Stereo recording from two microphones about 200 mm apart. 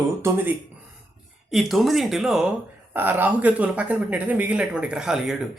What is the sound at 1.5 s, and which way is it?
Speech, centre (ahead or behind).